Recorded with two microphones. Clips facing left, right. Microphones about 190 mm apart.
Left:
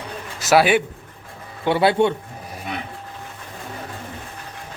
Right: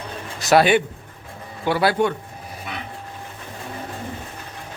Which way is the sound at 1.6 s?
25° left (ahead or behind).